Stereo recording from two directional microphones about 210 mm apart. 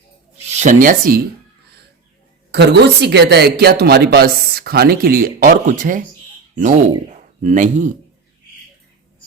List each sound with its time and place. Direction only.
0.4 s speech: 35° right (ahead or behind)
2.5 s speech: 55° right (ahead or behind); by 7.9 s 35° right (ahead or behind)